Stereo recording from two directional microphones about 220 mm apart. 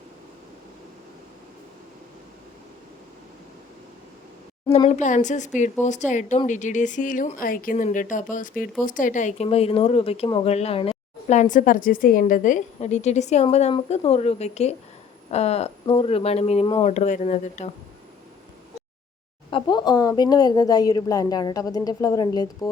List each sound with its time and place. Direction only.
4.7 s a woman's voice: 30° left (ahead or behind)
19.5 s a woman's voice: 20° left (ahead or behind)